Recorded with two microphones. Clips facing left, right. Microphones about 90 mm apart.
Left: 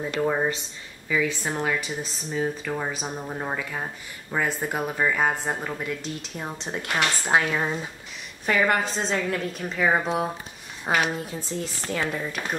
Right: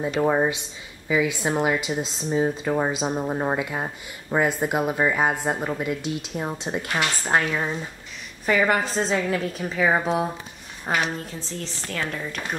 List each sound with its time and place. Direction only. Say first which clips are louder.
0.2 s a woman's voice: right 3 dB; 15° right (ahead or behind); by 10.3 s centre (ahead or behind)
11.1 s a woman's voice: left 1 dB; 10° left (ahead or behind)